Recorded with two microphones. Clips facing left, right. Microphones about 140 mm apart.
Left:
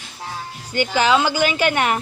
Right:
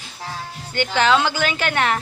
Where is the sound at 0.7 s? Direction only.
10° left (ahead or behind).